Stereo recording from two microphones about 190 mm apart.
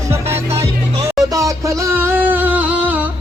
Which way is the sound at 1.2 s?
15° right (ahead or behind).